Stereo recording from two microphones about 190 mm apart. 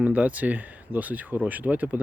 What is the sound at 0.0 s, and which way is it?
Speech, 5° right (ahead or behind).